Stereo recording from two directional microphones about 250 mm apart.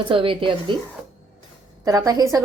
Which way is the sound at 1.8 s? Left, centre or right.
Centre.